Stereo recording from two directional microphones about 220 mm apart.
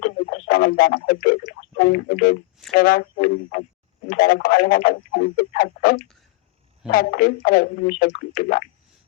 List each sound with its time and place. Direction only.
0.0 s didgeridoo: 35° left (ahead or behind)
1.7 s speech: 40° left (ahead or behind)